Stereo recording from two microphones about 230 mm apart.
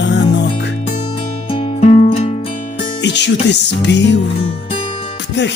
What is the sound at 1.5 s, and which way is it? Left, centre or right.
Music, left.